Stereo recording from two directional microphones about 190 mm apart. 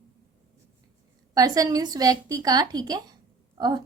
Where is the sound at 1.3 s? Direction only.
20° right (ahead or behind).